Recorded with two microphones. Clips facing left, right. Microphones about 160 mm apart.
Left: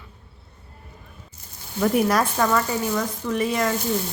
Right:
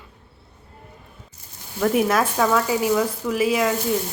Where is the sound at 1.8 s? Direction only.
Centre (ahead or behind).